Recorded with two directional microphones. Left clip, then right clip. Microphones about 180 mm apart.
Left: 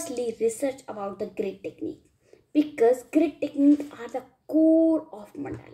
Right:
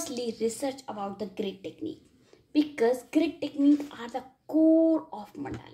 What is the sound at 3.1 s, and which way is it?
A woman's voice, 15° left (ahead or behind).